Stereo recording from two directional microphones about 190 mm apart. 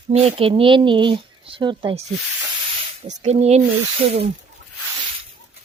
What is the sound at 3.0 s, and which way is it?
Speech, 35° right (ahead or behind).